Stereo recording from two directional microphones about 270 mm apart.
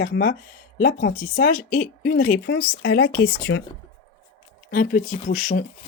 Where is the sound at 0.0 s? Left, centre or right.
Left.